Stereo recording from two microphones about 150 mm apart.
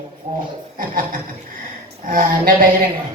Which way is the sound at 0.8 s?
65° right (ahead or behind).